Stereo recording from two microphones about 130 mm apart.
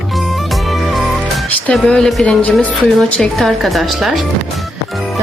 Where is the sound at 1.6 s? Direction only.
5° left (ahead or behind).